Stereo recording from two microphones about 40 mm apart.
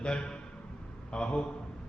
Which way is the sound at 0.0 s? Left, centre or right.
Left.